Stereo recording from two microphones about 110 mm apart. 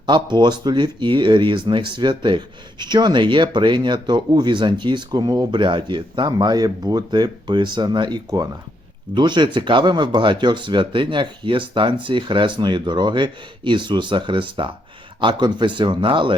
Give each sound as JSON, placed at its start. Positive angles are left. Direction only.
{"t": 0.0, "sound": "speech", "side_deg": -45}